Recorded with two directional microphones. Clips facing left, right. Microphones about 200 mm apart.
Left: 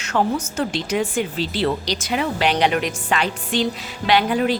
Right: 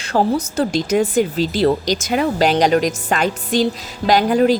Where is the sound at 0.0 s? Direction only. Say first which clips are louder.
Right 4 dB; 35° right (ahead or behind).